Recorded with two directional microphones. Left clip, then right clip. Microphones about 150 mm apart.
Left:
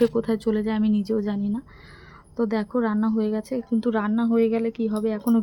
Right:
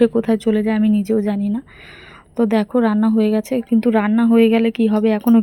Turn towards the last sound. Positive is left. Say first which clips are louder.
# right 8 dB
turn(degrees=-30)  # may be behind; listen again after turning